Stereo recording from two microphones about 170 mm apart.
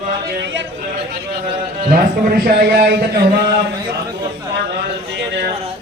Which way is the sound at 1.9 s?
60° right (ahead or behind).